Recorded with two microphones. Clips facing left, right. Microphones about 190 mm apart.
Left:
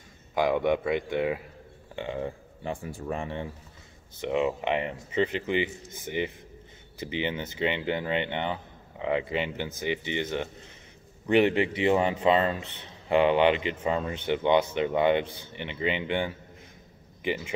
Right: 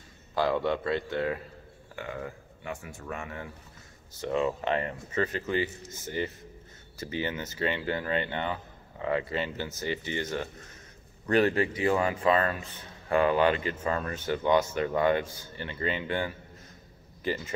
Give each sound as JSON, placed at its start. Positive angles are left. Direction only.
{"t": 0.3, "sound": "speech", "side_deg": 15}
{"t": 4.3, "sound": "speech", "side_deg": 15}